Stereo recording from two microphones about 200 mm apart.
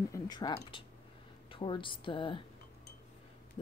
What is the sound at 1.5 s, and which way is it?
Speech, 25° left (ahead or behind).